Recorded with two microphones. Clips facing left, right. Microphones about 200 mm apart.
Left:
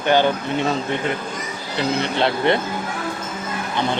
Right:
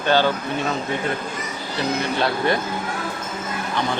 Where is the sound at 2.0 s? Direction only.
25° left (ahead or behind).